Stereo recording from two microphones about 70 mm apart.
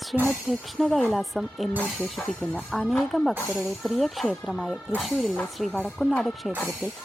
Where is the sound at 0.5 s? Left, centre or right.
Centre.